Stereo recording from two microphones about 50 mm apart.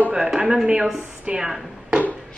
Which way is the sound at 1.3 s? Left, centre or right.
Centre.